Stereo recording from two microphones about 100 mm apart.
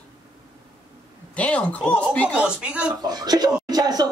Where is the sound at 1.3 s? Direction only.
15° left (ahead or behind).